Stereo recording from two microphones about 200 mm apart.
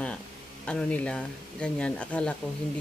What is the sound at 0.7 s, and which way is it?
Speech, 5° left (ahead or behind).